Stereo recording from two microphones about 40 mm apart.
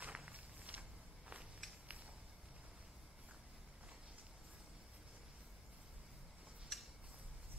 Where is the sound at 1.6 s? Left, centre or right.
Centre.